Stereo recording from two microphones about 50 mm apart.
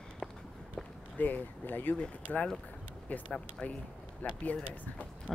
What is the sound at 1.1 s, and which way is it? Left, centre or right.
Speech, left.